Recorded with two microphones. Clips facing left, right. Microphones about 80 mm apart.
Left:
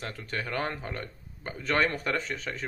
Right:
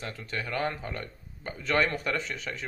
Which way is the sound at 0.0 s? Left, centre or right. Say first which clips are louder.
Left 1 dB; left.